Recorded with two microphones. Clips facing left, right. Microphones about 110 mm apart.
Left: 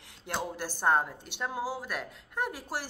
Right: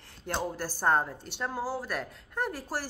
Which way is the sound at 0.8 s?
10° left (ahead or behind).